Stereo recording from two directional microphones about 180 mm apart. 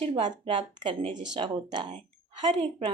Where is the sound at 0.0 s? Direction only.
25° right (ahead or behind).